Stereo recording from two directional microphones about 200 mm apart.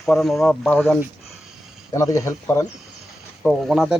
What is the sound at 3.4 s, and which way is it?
Speech, centre (ahead or behind).